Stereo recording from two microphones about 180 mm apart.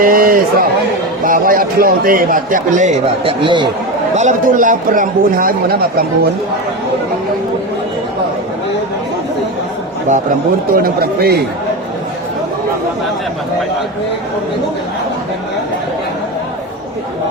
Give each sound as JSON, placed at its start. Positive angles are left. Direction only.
{"t": 0.0, "sound": "a man's voice", "side_deg": -55}
{"t": 4.1, "sound": "a man's voice", "side_deg": -40}
{"t": 10.8, "sound": "speech", "side_deg": -60}